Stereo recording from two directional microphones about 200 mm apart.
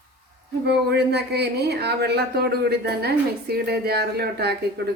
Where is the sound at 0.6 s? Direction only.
55° right (ahead or behind).